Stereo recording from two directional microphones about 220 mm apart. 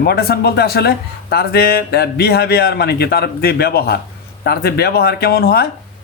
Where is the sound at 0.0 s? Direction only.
45° left (ahead or behind).